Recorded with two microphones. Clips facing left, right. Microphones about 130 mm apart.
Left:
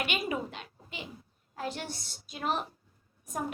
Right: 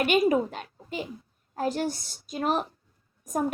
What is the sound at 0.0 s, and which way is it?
A woman's voice, 45° right (ahead or behind).